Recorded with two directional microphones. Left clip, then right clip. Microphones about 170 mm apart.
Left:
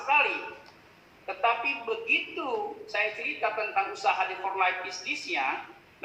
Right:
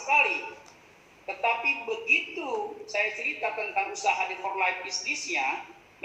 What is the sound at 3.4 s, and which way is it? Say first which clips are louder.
A woman's voice: left 3 dB; 65° left (ahead or behind).